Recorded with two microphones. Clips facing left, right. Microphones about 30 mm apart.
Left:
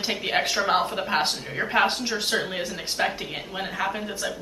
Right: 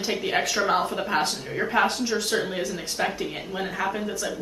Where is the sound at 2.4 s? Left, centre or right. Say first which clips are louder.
Right 1 dB; centre.